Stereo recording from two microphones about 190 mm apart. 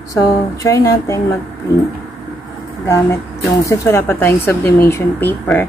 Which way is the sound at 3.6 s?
15° left (ahead or behind).